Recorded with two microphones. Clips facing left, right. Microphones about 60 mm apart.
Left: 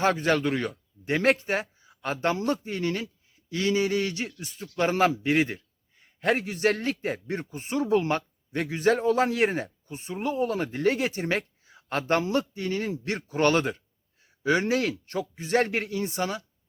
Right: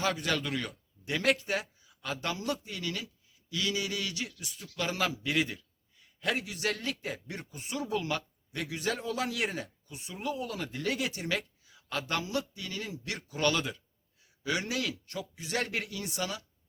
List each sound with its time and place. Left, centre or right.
0.0 s a man's voice: left